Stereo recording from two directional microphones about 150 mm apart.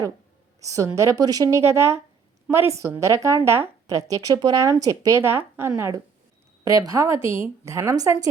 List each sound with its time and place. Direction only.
0.6 s a woman's voice: 20° right (ahead or behind)